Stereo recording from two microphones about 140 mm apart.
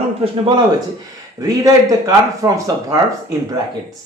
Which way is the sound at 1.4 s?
25° right (ahead or behind).